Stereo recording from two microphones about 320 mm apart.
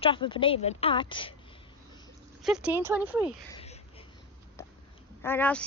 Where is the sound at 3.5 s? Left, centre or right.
Centre.